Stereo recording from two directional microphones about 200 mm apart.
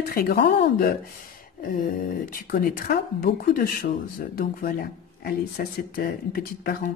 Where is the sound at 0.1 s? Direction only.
50° left (ahead or behind).